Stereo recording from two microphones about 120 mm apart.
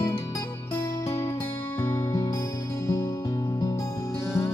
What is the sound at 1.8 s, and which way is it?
Music, 35° left (ahead or behind).